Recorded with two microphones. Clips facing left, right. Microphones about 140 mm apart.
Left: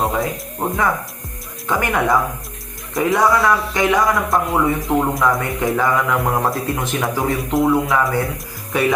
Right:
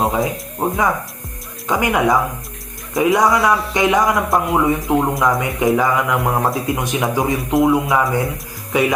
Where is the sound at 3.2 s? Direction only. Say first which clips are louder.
Even; centre (ahead or behind).